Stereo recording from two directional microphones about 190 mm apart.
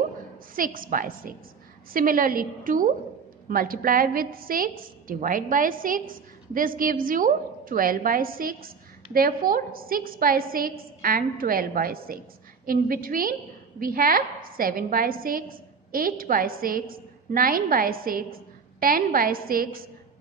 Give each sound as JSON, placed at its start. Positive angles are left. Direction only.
{"t": 0.6, "sound": "a woman's voice", "side_deg": -45}